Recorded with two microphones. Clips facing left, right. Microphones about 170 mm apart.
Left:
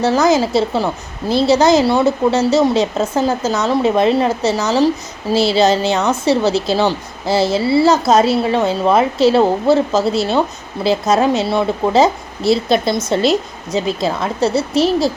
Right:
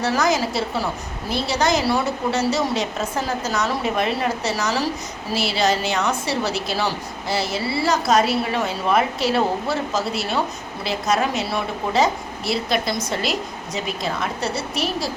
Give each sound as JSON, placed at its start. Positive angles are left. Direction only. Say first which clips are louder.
{"t": 0.0, "sound": "a woman's voice", "louder": "left 7 dB", "side_deg": 25}